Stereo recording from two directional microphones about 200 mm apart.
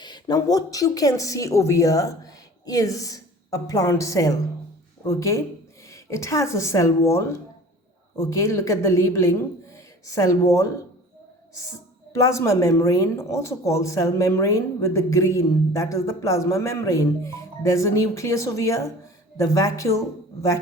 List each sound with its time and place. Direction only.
0.0 s a woman's voice: 20° left (ahead or behind)
12.1 s speech: 15° left (ahead or behind)